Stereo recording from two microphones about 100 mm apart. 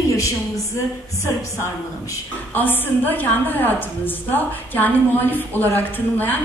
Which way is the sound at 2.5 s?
20° left (ahead or behind).